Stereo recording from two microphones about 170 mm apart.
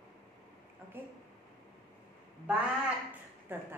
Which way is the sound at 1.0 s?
10° right (ahead or behind).